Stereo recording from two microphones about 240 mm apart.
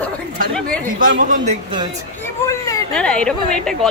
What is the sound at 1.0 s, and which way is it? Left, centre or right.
Speech, right.